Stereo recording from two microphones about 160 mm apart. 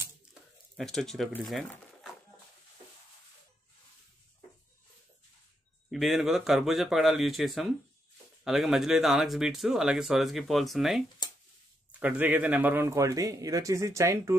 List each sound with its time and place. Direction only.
0.0 s tearing: 5° right (ahead or behind)
1.4 s speech: centre (ahead or behind)
5.9 s speech: centre (ahead or behind)
11.2 s a sound: 25° left (ahead or behind)
12.0 s a man's voice: 10° right (ahead or behind)